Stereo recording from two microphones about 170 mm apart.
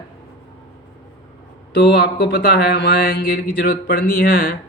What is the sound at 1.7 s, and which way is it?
Speech, 75° left (ahead or behind).